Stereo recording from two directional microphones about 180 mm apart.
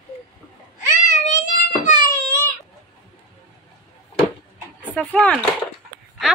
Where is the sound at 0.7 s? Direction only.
45° left (ahead or behind).